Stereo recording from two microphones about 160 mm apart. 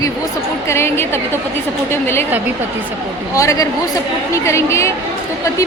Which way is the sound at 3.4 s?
20° left (ahead or behind).